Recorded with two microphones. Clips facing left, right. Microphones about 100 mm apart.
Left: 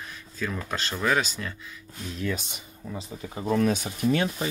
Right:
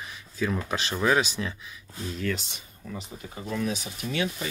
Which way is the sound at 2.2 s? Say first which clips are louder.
Left 1 dB; 15° left (ahead or behind).